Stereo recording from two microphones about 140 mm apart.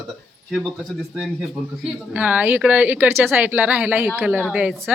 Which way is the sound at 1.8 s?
10° right (ahead or behind).